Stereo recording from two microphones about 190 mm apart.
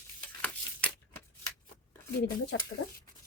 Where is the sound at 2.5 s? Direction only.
75° left (ahead or behind).